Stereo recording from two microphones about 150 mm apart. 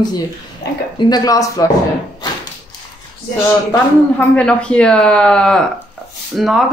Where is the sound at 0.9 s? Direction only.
30° left (ahead or behind).